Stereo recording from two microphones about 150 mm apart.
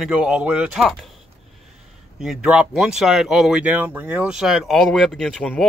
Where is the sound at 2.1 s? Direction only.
5° right (ahead or behind).